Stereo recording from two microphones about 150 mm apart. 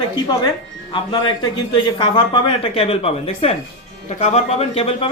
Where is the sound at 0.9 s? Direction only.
30° left (ahead or behind).